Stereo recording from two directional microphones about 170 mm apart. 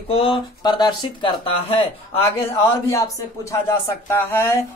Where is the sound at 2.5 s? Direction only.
15° left (ahead or behind).